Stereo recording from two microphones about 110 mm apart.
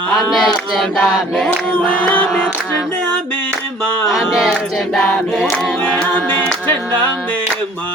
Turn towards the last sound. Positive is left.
turn(degrees=10)  # may be behind; listen again after turning